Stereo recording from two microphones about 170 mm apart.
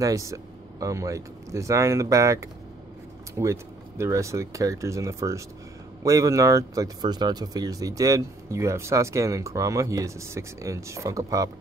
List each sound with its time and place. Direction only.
0.0 s speech: 20° right (ahead or behind)